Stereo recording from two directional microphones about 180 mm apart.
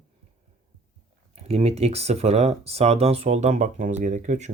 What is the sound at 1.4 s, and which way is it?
Speech, 35° right (ahead or behind).